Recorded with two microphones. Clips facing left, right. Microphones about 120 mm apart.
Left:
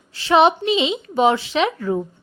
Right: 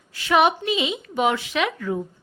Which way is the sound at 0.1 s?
30° left (ahead or behind).